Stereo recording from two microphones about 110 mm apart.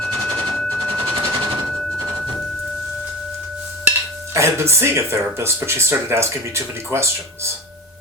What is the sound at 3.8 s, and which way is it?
Speech, 25° right (ahead or behind).